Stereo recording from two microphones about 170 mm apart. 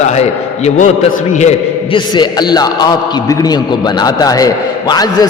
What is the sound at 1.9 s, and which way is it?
A man's voice, 25° left (ahead or behind).